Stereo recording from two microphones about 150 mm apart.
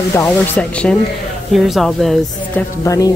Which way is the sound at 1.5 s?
Centre (ahead or behind).